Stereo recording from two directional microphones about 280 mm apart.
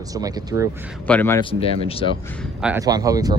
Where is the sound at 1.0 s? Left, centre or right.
Centre.